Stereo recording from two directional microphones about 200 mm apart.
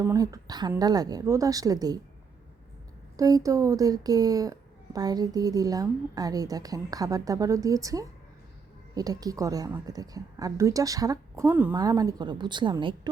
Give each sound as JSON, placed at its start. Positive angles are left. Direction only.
{"t": 0.0, "sound": "a woman's voice", "side_deg": -15}
{"t": 3.2, "sound": "a woman's voice", "side_deg": -15}